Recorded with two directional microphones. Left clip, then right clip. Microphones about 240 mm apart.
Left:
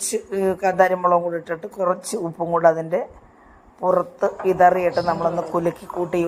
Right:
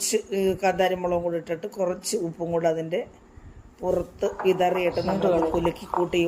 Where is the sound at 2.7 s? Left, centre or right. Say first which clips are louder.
Left 4 dB; left.